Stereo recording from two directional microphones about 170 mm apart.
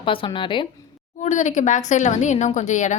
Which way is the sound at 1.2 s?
45° left (ahead or behind).